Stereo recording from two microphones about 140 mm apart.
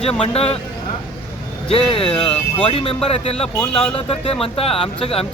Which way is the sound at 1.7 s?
40° left (ahead or behind).